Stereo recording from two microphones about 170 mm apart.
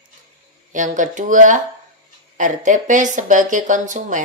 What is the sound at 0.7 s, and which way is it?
Speech, 50° right (ahead or behind).